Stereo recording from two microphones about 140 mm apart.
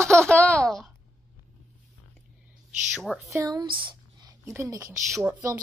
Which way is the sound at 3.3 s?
25° right (ahead or behind).